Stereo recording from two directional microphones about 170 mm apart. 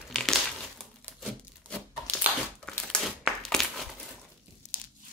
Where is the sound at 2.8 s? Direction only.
Centre (ahead or behind).